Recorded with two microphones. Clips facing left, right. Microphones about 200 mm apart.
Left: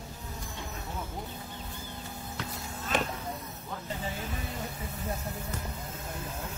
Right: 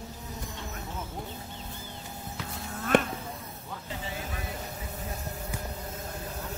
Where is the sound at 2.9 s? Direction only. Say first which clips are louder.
Right 7 dB; 60° right (ahead or behind).